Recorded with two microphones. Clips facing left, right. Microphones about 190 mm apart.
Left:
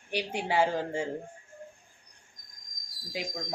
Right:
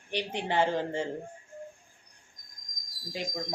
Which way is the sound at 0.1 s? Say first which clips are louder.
Left 1 dB; 10° left (ahead or behind).